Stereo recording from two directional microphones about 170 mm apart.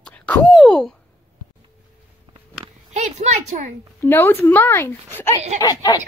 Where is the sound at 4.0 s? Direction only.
10° left (ahead or behind).